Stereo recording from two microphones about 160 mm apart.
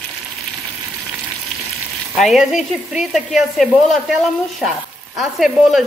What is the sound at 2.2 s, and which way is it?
Speech, 5° right (ahead or behind).